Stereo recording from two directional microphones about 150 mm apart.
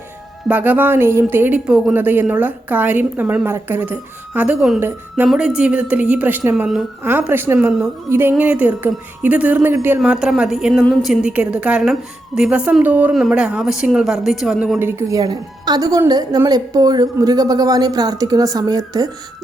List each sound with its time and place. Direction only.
0.4 s speech: 10° right (ahead or behind)
14.8 s a woman's voice: 15° right (ahead or behind)